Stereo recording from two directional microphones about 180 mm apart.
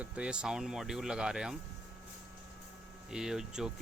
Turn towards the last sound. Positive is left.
turn(degrees=-5)  # may be behind; listen again after turning